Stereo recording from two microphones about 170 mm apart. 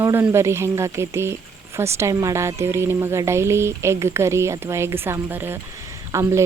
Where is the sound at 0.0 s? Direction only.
15° right (ahead or behind).